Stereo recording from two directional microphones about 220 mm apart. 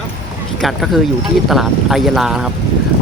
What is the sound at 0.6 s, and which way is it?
Speech, centre (ahead or behind).